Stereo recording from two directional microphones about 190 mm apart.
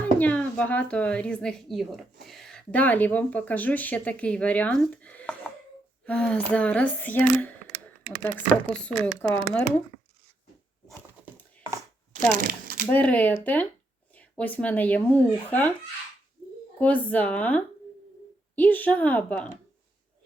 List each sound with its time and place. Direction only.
0.2 s a woman's voice: 10° left (ahead or behind)
12.4 s speech: 45° right (ahead or behind)
12.9 s speech: 5° left (ahead or behind)
16.8 s speech: 10° left (ahead or behind)